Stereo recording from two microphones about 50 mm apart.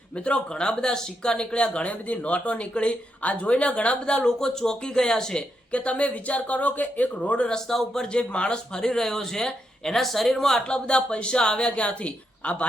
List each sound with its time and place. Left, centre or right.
0.3 s speech: centre
5.7 s speech: left
7.5 s speech: centre
8.1 s speech: left